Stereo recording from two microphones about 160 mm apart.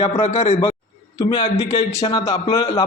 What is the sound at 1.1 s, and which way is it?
A man's voice, 20° left (ahead or behind).